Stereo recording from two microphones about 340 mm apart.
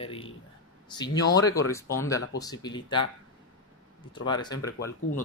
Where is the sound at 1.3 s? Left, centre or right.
Centre.